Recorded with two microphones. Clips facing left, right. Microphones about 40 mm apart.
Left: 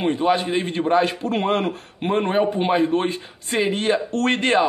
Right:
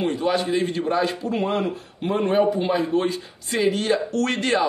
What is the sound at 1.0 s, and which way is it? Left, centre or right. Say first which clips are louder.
Speech: left 2 dB; left.